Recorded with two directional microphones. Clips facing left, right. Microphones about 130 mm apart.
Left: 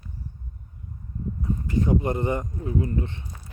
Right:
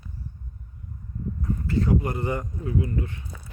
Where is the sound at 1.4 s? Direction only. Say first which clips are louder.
Even; 15° left (ahead or behind).